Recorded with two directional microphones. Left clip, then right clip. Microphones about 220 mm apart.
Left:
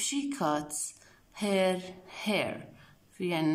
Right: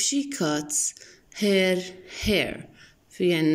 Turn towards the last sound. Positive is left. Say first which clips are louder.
# right 8 dB
turn(degrees=5)  # may be behind; listen again after turning